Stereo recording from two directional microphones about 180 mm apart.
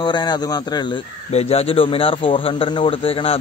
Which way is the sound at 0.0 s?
25° left (ahead or behind).